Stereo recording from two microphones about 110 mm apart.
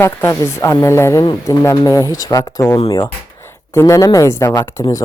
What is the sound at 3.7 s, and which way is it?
A woman's voice, 25° left (ahead or behind).